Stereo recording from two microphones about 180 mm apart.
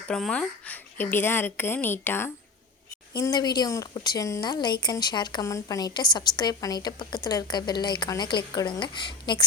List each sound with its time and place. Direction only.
0.1 s a woman's voice: 5° left (ahead or behind); by 9.4 s 25° left (ahead or behind)